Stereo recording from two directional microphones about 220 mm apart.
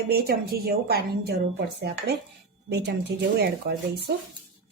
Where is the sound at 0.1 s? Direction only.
45° right (ahead or behind).